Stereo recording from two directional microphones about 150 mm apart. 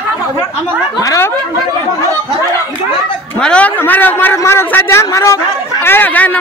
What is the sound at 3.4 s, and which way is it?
A man's voice, 10° left (ahead or behind).